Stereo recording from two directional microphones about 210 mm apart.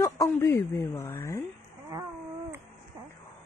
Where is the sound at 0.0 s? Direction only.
15° left (ahead or behind).